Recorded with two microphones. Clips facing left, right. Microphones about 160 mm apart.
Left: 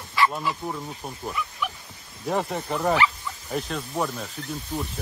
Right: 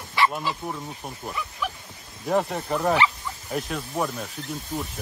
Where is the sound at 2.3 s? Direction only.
Centre (ahead or behind).